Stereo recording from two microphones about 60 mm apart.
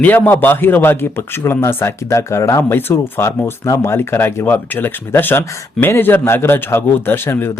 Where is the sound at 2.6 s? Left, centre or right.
Left.